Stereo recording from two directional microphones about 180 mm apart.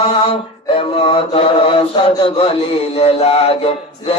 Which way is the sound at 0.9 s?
30° left (ahead or behind).